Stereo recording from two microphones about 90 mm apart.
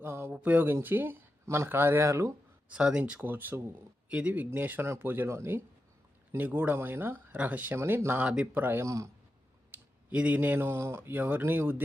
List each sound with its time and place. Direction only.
0.0 s a sound: 25° right (ahead or behind)
0.3 s speech: 20° right (ahead or behind)
2.6 s speech: 10° right (ahead or behind)
8.8 s a man's voice: 35° right (ahead or behind)
9.7 s speech: 15° right (ahead or behind)